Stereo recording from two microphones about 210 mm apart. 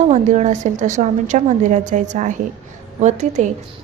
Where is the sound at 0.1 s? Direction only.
35° right (ahead or behind).